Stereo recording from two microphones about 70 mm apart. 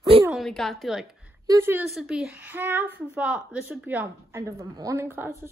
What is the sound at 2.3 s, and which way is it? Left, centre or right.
Speech, right.